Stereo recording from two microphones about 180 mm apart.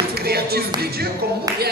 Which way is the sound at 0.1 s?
60° right (ahead or behind).